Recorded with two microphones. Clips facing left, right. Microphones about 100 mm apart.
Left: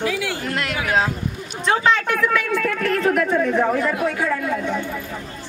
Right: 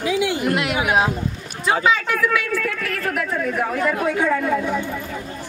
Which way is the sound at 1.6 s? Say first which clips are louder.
Even; 5° right (ahead or behind).